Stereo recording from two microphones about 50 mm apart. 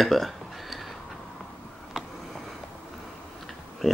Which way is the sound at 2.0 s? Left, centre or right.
Centre.